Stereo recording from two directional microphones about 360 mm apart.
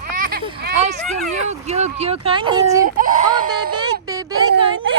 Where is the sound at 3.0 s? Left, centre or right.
Right.